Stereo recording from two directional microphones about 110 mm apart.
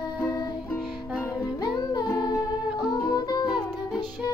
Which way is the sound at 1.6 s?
40° left (ahead or behind).